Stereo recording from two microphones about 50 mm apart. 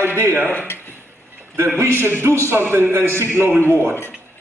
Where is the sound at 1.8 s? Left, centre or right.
Right.